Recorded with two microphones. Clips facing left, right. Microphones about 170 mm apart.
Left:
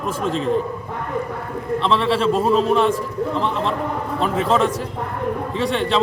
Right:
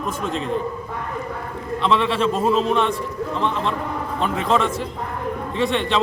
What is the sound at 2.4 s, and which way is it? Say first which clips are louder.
Speech: right 1 dB; 35° left (ahead or behind).